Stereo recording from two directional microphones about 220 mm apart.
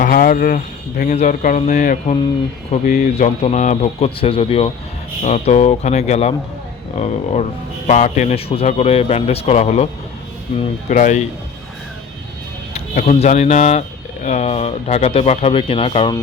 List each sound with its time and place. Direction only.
0.0 s a man's voice: 40° left (ahead or behind)
12.7 s a man's voice: 30° left (ahead or behind)